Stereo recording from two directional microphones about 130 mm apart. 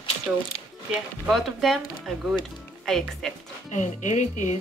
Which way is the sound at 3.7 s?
70° left (ahead or behind).